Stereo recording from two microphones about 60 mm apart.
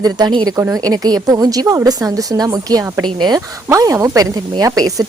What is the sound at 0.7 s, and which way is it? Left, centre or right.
A woman's voice, right.